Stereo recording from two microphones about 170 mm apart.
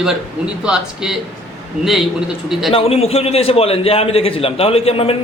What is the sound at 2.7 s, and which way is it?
A man's voice, 35° left (ahead or behind).